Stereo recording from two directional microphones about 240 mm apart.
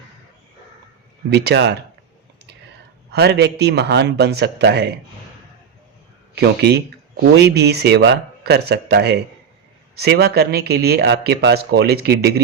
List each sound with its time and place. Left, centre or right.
1.3 s a man's voice: right
3.1 s a man's voice: right
6.3 s a man's voice: right